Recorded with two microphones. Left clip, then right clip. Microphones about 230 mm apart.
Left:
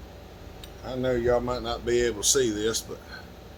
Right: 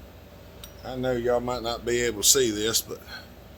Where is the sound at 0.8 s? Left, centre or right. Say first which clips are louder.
Left 1 dB; centre.